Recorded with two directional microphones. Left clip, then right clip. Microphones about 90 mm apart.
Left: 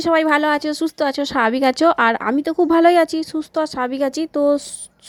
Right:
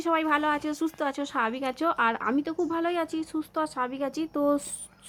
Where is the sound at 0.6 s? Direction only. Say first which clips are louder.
Left 9 dB; 45° left (ahead or behind); by 2.3 s 90° left.